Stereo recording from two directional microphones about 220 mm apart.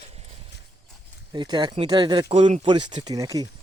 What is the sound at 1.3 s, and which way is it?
Speech, 20° right (ahead or behind).